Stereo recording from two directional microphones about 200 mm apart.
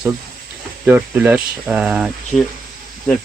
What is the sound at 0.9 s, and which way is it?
Speech, 10° right (ahead or behind).